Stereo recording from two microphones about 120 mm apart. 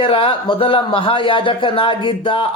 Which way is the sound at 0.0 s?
50° left (ahead or behind).